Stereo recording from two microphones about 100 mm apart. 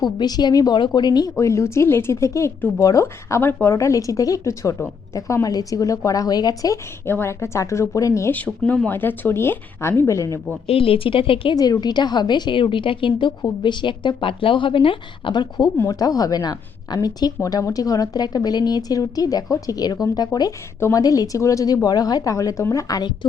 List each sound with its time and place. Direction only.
0.0 s a woman's voice: 45° left (ahead or behind)
1.4 s a woman's voice: 30° left (ahead or behind)
7.1 s speech: 25° left (ahead or behind)
8.3 s speech: 15° left (ahead or behind); by 10.4 s 30° left (ahead or behind)
10.7 s speech: 70° left (ahead or behind)
11.5 s a woman's voice: 40° left (ahead or behind)
15.8 s a woman's voice: 35° left (ahead or behind)
20.7 s speech: 25° left (ahead or behind)
21.0 s a woman's voice: 40° left (ahead or behind)